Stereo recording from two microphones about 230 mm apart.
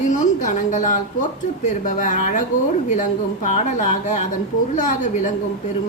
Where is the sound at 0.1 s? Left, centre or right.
Left.